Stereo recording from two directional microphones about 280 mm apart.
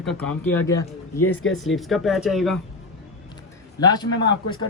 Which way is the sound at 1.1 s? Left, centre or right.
Left.